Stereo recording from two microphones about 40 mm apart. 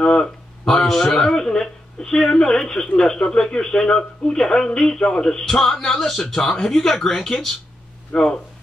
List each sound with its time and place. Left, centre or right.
0.0 s speech: centre
8.1 s speech: left